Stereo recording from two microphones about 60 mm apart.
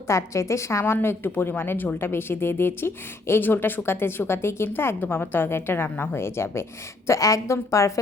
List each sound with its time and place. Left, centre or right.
0.1 s a woman's voice: left
1.0 s a woman's voice: left
7.1 s a woman's voice: left